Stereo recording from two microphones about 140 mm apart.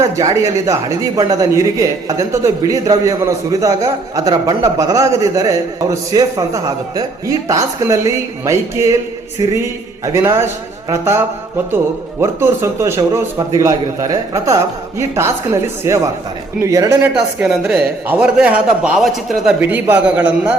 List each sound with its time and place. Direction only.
0.0 s a man's voice: 25° right (ahead or behind)
10.1 s a man's voice: 20° right (ahead or behind)
17.2 s speech: 5° right (ahead or behind)
19.5 s a man's voice: 10° right (ahead or behind)